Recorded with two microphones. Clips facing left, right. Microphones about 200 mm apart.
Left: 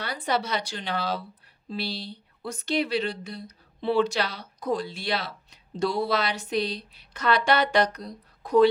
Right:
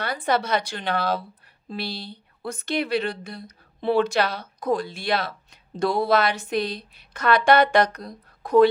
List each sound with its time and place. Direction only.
0.0 s a woman's voice: 50° right (ahead or behind)